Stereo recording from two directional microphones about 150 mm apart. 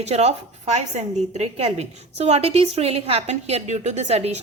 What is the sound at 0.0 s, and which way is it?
A woman's voice, 45° right (ahead or behind).